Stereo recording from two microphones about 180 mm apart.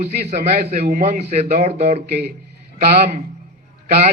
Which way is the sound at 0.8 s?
50° right (ahead or behind).